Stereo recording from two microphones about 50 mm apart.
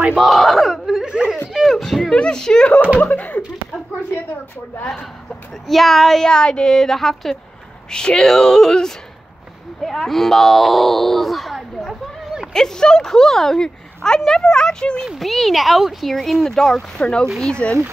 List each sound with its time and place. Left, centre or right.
0.1 s a sound: centre
1.0 s whimper: centre
1.5 s a sound: centre
2.0 s speech: centre
3.0 s speech: left
5.5 s speech: centre
7.9 s speech: centre
12.5 s speech: centre
15.1 s speech: centre; by 17.7 s left